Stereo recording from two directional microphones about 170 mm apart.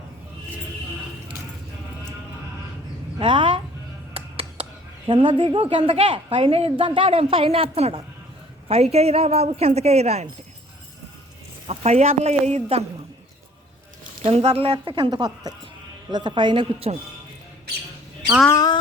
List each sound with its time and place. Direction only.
3.2 s a sound: 30° right (ahead or behind)
4.1 s music: 35° right (ahead or behind)
5.0 s a woman's voice: 30° right (ahead or behind)
11.7 s a woman's voice: 40° right (ahead or behind)
14.3 s a woman's voice: 35° right (ahead or behind)
18.4 s speech: 20° left (ahead or behind)